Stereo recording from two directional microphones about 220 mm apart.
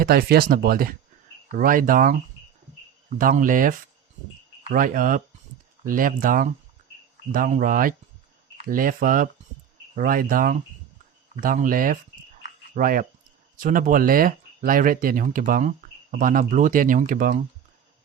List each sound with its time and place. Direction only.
0.0 s speech: 45° right (ahead or behind)